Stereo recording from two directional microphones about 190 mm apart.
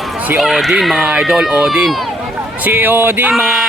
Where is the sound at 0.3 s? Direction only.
Centre (ahead or behind).